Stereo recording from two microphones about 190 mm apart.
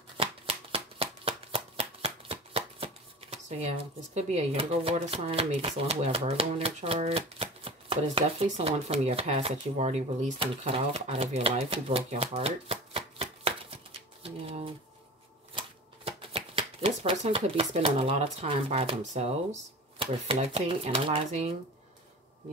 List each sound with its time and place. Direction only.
0.2 s shuffling cards: 30° right (ahead or behind)
14.2 s typewriter: 30° right (ahead or behind)
15.5 s speech: 30° right (ahead or behind)